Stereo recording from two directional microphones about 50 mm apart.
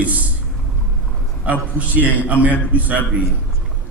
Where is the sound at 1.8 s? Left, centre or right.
Right.